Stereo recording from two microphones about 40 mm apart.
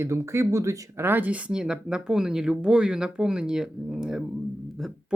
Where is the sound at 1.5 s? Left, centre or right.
Centre.